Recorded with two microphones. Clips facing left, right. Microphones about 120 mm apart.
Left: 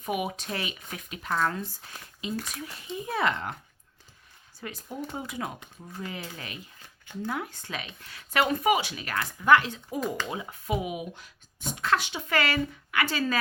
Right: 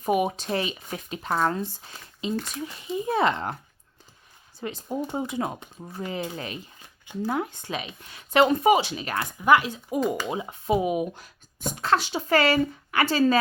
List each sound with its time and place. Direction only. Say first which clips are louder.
0.0 s speech: right 7 dB; 35° right (ahead or behind)
4.6 s speech: right 6 dB; 25° right (ahead or behind)